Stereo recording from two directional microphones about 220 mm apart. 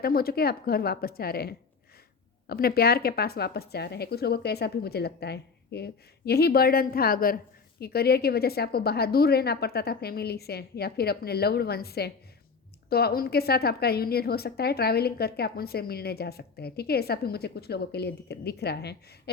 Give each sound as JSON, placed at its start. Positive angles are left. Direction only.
{"t": 0.0, "sound": "a woman's voice", "side_deg": 45}